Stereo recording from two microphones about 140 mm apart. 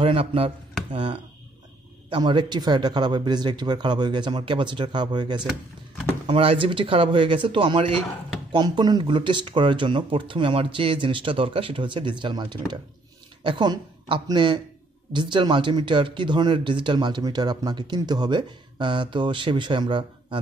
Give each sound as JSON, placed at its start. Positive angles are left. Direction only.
{"t": 0.0, "sound": "speech", "side_deg": -40}
{"t": 2.0, "sound": "speech", "side_deg": -35}